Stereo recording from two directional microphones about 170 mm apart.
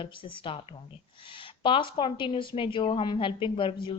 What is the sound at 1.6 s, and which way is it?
A woman's voice, 30° left (ahead or behind).